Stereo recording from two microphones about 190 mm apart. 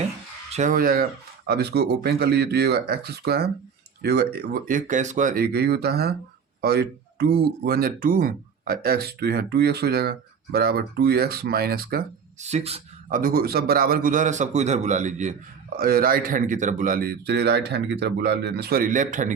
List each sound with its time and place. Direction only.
0.5 s a man's voice: 45° right (ahead or behind)
12.4 s speech: 35° right (ahead or behind)
13.1 s a man's voice: 50° right (ahead or behind)